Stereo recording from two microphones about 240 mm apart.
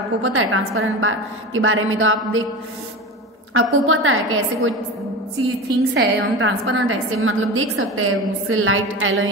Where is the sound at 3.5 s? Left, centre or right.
Right.